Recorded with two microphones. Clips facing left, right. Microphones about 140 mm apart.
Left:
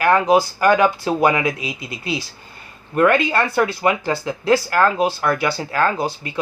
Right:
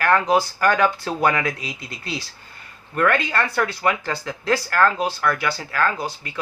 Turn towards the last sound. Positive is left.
turn(degrees=20)  # may be behind; listen again after turning